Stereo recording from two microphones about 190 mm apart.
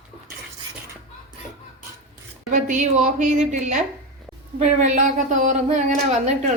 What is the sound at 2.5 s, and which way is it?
Speech, 40° right (ahead or behind).